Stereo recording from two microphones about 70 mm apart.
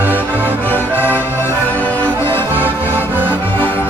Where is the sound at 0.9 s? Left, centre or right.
Right.